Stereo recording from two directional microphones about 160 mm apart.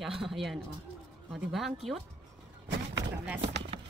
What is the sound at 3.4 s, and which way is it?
Speech, 45° right (ahead or behind).